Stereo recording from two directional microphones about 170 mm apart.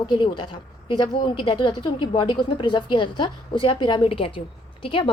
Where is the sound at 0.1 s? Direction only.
25° left (ahead or behind).